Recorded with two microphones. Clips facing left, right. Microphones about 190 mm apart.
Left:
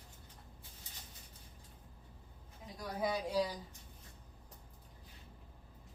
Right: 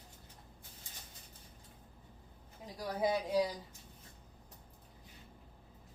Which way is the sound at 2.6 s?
25° right (ahead or behind).